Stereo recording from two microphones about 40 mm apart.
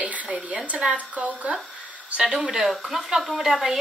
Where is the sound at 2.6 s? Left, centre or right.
Centre.